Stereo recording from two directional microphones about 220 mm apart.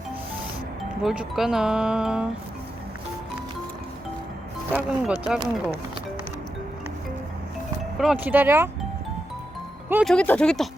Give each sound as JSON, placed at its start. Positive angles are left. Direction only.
{"t": 0.8, "sound": "speech", "side_deg": -5}
{"t": 4.7, "sound": "speech", "side_deg": -5}
{"t": 7.9, "sound": "speech", "side_deg": -5}
{"t": 9.9, "sound": "speech", "side_deg": 0}